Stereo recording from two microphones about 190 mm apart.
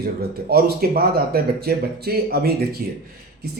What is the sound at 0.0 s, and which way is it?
Speech, 55° right (ahead or behind).